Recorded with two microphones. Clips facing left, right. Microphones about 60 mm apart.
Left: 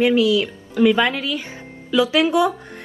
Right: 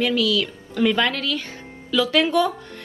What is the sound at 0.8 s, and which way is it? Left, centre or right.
Speech, centre.